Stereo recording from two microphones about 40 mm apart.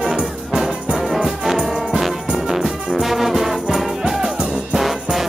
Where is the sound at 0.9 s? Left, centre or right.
Centre.